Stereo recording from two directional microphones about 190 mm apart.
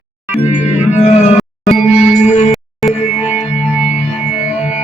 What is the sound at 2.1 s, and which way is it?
Music, 40° left (ahead or behind).